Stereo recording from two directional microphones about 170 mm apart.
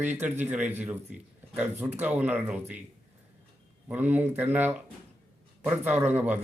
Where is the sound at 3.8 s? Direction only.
10° right (ahead or behind).